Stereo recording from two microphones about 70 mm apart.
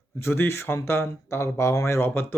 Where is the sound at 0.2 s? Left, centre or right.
Left.